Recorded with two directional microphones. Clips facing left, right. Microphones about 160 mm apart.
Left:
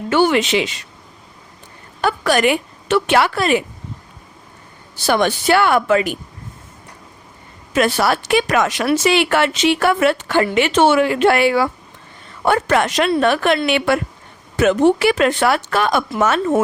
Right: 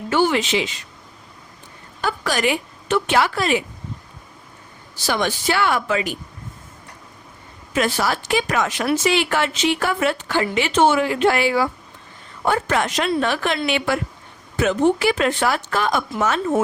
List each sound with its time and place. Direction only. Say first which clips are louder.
0.1 s speech: left 4 dB; 70° left (ahead or behind)
2.0 s a woman's voice: left 6 dB; 65° left (ahead or behind)
5.0 s speech: left 5 dB; 60° left (ahead or behind)
7.7 s speech: left 4 dB; 65° left (ahead or behind)